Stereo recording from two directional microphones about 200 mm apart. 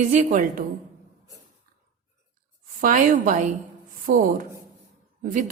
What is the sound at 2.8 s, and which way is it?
A woman's voice, 40° right (ahead or behind).